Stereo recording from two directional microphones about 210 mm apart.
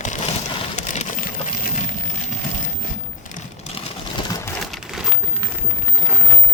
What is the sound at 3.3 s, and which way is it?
Sewing machine, 35° left (ahead or behind).